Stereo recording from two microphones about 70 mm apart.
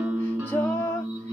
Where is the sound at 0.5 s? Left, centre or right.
Left.